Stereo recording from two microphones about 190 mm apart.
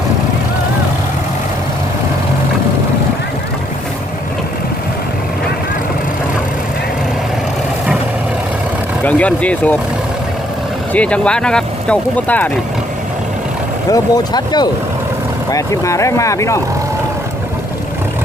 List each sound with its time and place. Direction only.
9.0 s speech: 5° left (ahead or behind)
10.9 s speech: 5° left (ahead or behind)
13.9 s speech: 20° left (ahead or behind)